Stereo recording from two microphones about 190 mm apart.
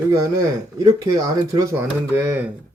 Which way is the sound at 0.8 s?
20° right (ahead or behind).